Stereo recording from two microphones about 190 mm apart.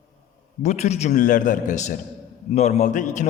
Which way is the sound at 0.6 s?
35° left (ahead or behind).